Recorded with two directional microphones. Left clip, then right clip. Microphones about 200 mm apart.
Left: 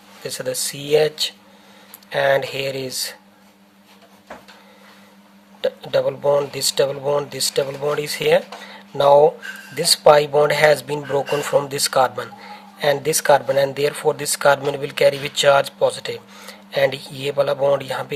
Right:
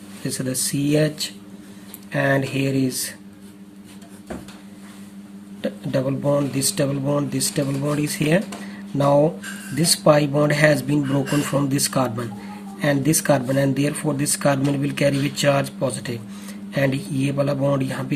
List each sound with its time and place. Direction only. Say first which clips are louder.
0.3 s speech: left 2 dB; 35° left (ahead or behind)
5.6 s speech: left 5 dB; 40° left (ahead or behind)